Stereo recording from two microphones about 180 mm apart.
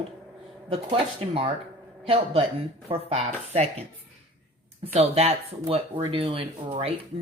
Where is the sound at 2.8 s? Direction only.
35° right (ahead or behind).